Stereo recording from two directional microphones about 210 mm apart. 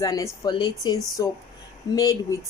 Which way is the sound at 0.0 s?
20° left (ahead or behind).